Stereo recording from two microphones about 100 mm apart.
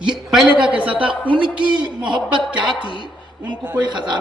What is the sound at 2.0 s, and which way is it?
Speech, 50° right (ahead or behind).